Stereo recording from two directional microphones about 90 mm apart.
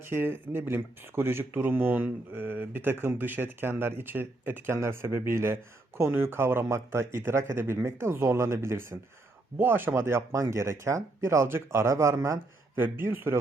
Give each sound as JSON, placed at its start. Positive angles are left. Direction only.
{"t": 0.0, "sound": "speech", "side_deg": -25}